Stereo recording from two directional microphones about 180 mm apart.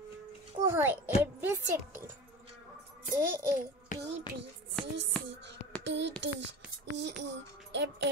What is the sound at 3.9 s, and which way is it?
Music, 45° left (ahead or behind).